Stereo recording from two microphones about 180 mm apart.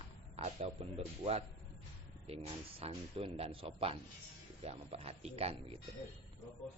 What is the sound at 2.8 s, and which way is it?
Speech, 35° right (ahead or behind).